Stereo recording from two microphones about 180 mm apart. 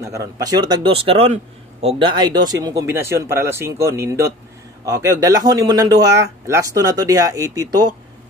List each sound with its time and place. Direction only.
0.0 s speech: 20° right (ahead or behind)